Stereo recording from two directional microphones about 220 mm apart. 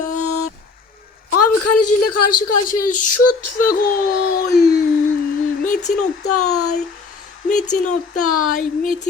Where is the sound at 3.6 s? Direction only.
40° left (ahead or behind).